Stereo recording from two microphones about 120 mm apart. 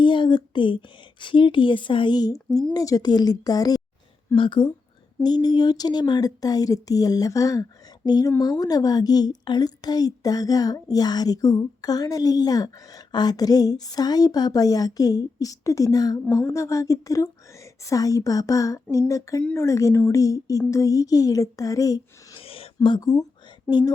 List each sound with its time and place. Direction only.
0.0 s a woman's voice: 40° left (ahead or behind)
4.4 s a woman's voice: 40° left (ahead or behind)
22.4 s a sound: 50° left (ahead or behind)
23.0 s speech: 30° left (ahead or behind)